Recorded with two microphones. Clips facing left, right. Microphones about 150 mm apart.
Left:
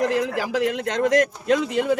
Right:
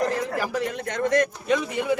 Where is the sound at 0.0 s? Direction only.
90° left.